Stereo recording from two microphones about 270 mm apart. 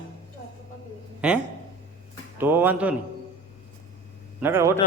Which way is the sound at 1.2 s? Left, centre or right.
Centre.